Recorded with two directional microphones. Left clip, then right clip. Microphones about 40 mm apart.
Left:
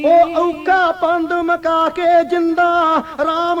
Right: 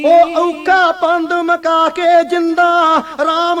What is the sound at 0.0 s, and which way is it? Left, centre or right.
Music, left.